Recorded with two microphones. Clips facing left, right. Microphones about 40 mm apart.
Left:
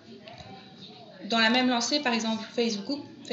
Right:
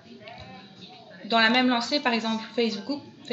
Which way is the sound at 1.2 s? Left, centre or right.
Right.